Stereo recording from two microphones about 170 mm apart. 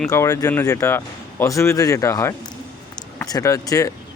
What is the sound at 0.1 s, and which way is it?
Speech, 20° left (ahead or behind).